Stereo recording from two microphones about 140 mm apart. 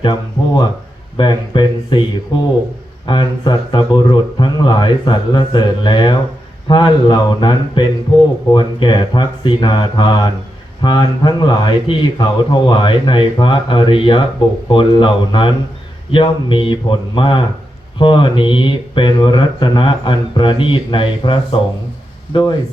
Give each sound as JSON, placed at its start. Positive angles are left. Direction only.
{"t": 0.0, "sound": "speech", "side_deg": 35}